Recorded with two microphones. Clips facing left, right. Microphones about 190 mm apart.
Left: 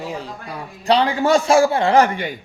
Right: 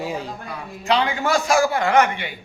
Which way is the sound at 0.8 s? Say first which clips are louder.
Left 4 dB; 35° left (ahead or behind).